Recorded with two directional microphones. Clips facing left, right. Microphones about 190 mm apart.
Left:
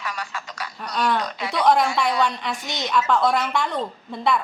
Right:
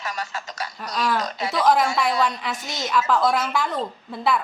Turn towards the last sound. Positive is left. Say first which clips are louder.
# even
turn(degrees=0)  # may be behind; listen again after turning